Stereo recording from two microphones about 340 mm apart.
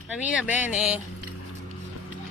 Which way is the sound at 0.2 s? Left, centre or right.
Centre.